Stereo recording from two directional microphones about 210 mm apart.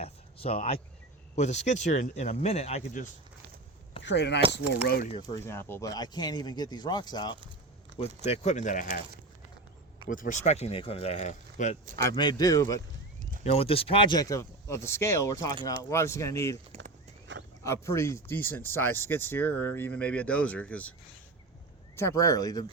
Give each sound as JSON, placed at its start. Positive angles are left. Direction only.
{"t": 0.0, "sound": "a sound", "side_deg": 25}
{"t": 1.4, "sound": "speech", "side_deg": 35}
{"t": 4.0, "sound": "speech", "side_deg": 55}
{"t": 5.1, "sound": "speech", "side_deg": 15}
{"t": 10.1, "sound": "speech", "side_deg": 40}
{"t": 11.9, "sound": "speech", "side_deg": 20}
{"t": 13.4, "sound": "speech", "side_deg": 30}
{"t": 17.6, "sound": "speech", "side_deg": 15}
{"t": 21.9, "sound": "speech", "side_deg": 15}